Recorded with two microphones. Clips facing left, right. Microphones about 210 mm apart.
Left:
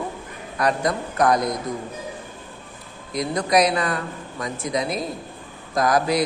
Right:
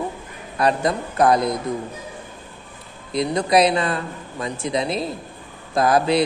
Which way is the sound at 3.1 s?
25° right (ahead or behind).